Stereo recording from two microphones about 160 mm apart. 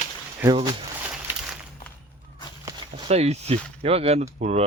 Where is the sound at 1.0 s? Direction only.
10° right (ahead or behind).